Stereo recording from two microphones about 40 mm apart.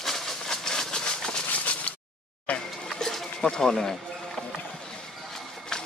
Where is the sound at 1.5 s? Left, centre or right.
Left.